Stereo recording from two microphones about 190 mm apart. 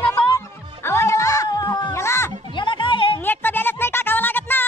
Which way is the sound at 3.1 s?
10° left (ahead or behind).